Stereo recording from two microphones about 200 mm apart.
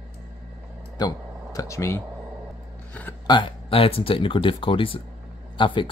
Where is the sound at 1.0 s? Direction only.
20° left (ahead or behind).